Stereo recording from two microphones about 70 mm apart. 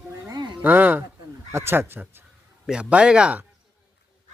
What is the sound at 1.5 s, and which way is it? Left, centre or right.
Speech, right.